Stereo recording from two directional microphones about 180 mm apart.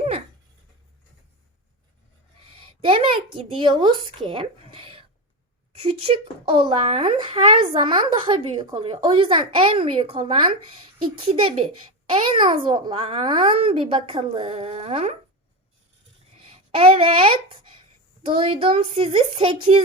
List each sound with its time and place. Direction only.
2.6 s a sound: 30° right (ahead or behind)
3.3 s a child's voice: 30° right (ahead or behind)
16.7 s a child's voice: 30° right (ahead or behind)